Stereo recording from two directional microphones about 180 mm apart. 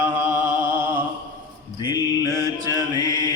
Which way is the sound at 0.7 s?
10° right (ahead or behind).